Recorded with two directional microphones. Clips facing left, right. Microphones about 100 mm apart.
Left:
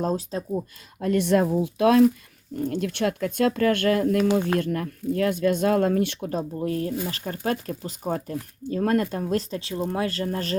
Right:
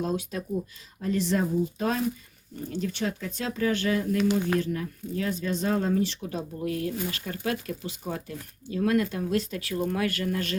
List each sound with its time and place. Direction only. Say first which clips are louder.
0.0 s speech: left 3 dB; 35° left (ahead or behind)
0.9 s speech: left 6 dB; 60° left (ahead or behind)
2.6 s speech: left 5 dB; 60° left (ahead or behind)
6.1 s speech: left 5 dB; 40° left (ahead or behind)